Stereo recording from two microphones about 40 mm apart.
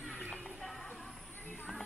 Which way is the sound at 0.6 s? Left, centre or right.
Centre.